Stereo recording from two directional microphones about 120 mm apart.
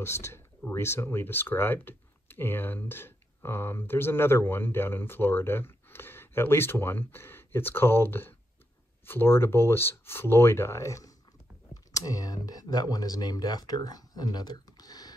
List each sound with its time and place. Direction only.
0.0 s speech: 20° left (ahead or behind)